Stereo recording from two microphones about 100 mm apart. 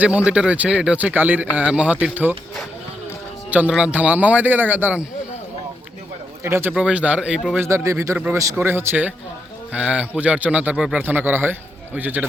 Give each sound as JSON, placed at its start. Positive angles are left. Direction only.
{"t": 0.3, "sound": "speech", "side_deg": -10}
{"t": 3.8, "sound": "speech", "side_deg": -10}
{"t": 6.4, "sound": "speech", "side_deg": -25}
{"t": 6.7, "sound": "speech", "side_deg": -10}
{"t": 7.5, "sound": "speech", "side_deg": -25}